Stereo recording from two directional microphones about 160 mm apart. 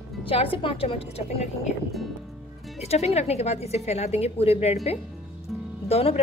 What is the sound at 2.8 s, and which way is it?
A woman's voice, 40° left (ahead or behind).